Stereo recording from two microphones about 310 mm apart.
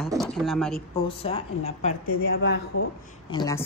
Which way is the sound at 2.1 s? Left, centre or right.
Left.